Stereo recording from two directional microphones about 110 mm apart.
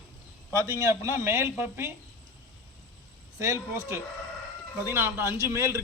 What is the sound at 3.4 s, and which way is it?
A man's voice, 25° right (ahead or behind).